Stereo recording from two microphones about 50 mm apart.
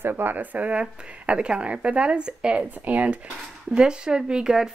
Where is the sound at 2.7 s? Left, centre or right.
Right.